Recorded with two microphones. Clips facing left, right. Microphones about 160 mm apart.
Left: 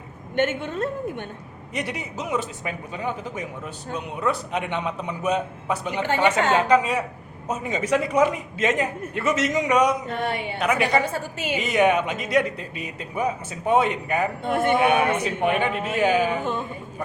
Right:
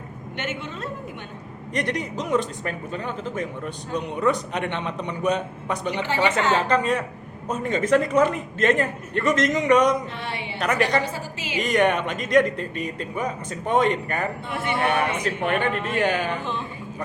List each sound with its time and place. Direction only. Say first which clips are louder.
0.3 s a woman's voice: left 8 dB; 55° left (ahead or behind)
1.7 s a man's voice: right 4 dB; 10° left (ahead or behind)
10.1 s a woman's voice: left 6 dB; 50° left (ahead or behind)
10.6 s a man's voice: even; 5° left (ahead or behind)
11.0 s a woman's voice: left 2 dB; 55° left (ahead or behind)
11.6 s speech: even; 5° left (ahead or behind)
14.4 s a woman's voice: left 7 dB; 50° left (ahead or behind)
15.2 s speech: left 1 dB; 10° left (ahead or behind)
16.4 s a woman's voice: left 3 dB; 50° left (ahead or behind)